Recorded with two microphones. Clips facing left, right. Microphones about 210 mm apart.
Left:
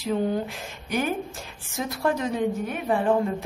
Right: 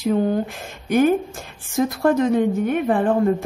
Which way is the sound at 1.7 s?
50° right (ahead or behind).